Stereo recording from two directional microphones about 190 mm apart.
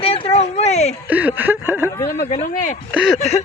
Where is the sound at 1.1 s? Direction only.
10° right (ahead or behind).